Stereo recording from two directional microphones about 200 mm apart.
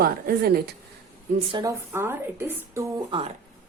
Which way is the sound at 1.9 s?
10° right (ahead or behind).